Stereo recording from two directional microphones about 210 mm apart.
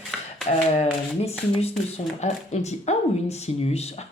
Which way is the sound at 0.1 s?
Centre (ahead or behind).